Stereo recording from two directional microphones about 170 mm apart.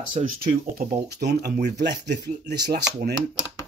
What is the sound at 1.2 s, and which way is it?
Speech, 75° right (ahead or behind).